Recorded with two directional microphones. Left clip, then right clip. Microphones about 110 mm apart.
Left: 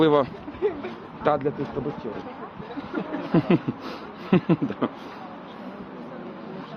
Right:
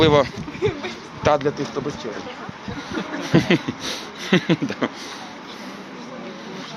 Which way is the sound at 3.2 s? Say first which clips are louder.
Right 4 dB; 15° left (ahead or behind).